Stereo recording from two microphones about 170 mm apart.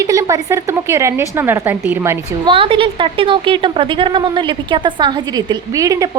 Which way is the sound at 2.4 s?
30° right (ahead or behind).